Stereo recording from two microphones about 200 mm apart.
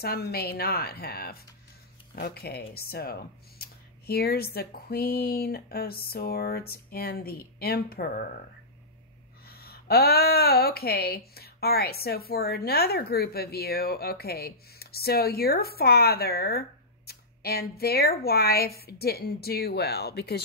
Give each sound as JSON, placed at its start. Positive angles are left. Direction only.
{"t": 0.0, "sound": "speech", "side_deg": 50}
{"t": 9.5, "sound": "speech", "side_deg": 50}